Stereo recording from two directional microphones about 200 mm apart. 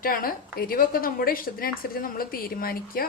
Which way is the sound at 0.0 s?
45° left (ahead or behind).